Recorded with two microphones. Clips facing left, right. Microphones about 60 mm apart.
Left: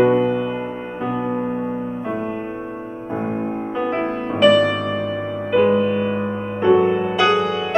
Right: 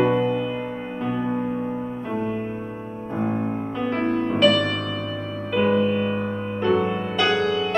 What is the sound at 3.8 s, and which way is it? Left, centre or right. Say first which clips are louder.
Music: even; left.